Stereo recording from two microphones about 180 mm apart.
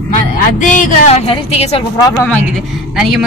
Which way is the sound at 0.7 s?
45° left (ahead or behind).